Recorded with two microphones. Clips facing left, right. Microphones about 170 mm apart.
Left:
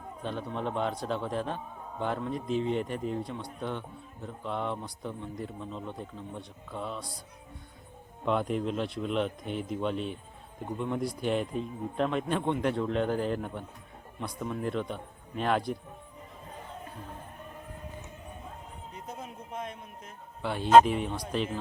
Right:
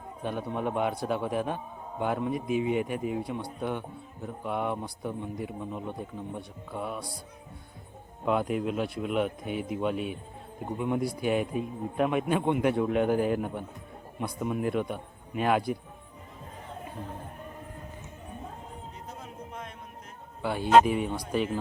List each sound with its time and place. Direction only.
0.2 s a man's voice: 10° right (ahead or behind)
8.2 s a man's voice: 5° right (ahead or behind)
19.0 s music: 20° left (ahead or behind)
20.4 s speech: 5° right (ahead or behind)